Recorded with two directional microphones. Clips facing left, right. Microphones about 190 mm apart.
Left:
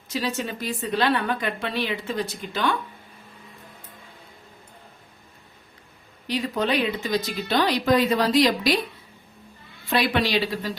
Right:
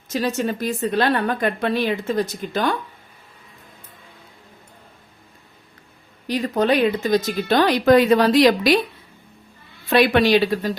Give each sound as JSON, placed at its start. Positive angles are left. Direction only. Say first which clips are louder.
{"t": 0.1, "sound": "a woman's voice", "louder": "right 5 dB", "side_deg": -45}
{"t": 6.2, "sound": "a woman's voice", "louder": "right 5 dB", "side_deg": -45}
{"t": 9.9, "sound": "a woman's voice", "louder": "right 7 dB", "side_deg": -60}